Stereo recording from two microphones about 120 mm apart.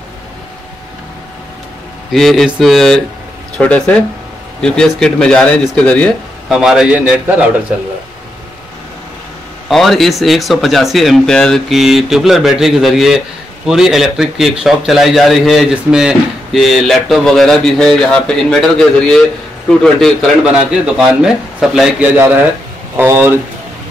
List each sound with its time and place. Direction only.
2.1 s a man's voice: centre (ahead or behind)
6.5 s speech: 5° right (ahead or behind)
9.7 s a man's voice: centre (ahead or behind)
22.9 s speech: 20° right (ahead or behind)